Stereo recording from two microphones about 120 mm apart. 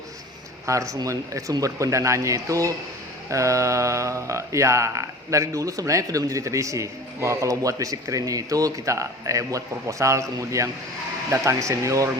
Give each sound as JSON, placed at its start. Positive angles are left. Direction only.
{"t": 0.6, "sound": "mantra", "side_deg": -25}